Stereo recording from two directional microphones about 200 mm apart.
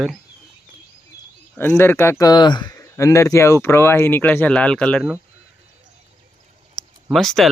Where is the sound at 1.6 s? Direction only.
10° left (ahead or behind).